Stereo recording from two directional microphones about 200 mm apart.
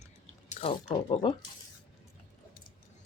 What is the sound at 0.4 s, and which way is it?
Speech, 35° left (ahead or behind).